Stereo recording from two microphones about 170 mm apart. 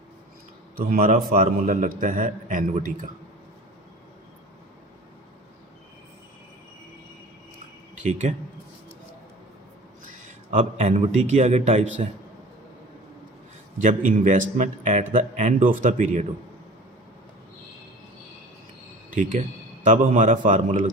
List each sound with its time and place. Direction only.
0.8 s a man's voice: 55° right (ahead or behind)
8.0 s a man's voice: 45° right (ahead or behind)
10.5 s a man's voice: 40° right (ahead or behind)
13.8 s a man's voice: 50° right (ahead or behind)
19.1 s a man's voice: 50° right (ahead or behind)